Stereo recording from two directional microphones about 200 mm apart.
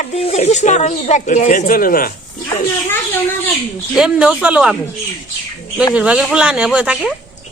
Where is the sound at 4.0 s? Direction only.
5° right (ahead or behind).